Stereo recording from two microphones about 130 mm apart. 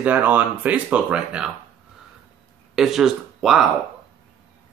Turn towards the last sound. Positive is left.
turn(degrees=-5)  # may be behind; listen again after turning